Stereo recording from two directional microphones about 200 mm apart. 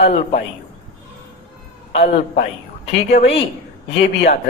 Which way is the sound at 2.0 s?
40° left (ahead or behind).